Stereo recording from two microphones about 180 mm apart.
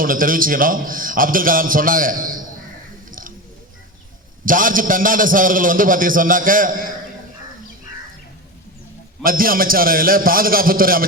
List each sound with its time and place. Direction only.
0.0 s a man's voice: 50° right (ahead or behind)
3.1 s chewing: 50° right (ahead or behind)
4.4 s a man's voice: 50° right (ahead or behind)
9.2 s a man's voice: 50° right (ahead or behind)